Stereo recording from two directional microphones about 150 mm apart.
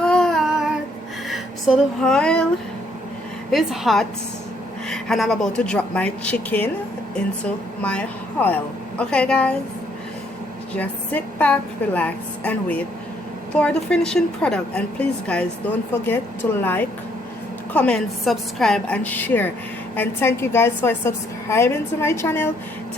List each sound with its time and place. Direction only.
0.0 s child singing: 5° left (ahead or behind)
1.3 s speech: centre (ahead or behind)
3.5 s speech: centre (ahead or behind)
7.8 s a woman's voice: 10° left (ahead or behind)
10.8 s a woman's voice: 10° left (ahead or behind)